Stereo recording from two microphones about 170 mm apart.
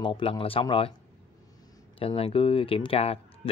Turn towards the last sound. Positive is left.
turn(degrees=35)  # may be behind; listen again after turning